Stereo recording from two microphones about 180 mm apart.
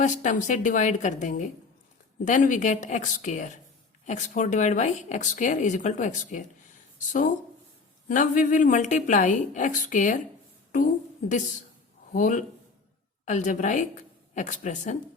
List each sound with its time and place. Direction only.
0.0 s speech: 45° left (ahead or behind)
12.1 s a woman's voice: 45° left (ahead or behind)